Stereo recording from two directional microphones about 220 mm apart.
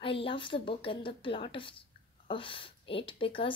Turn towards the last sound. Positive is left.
turn(degrees=25)  # may be behind; listen again after turning